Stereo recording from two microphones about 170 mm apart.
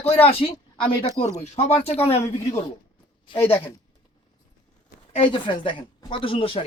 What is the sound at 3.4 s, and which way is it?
Speech, 10° left (ahead or behind).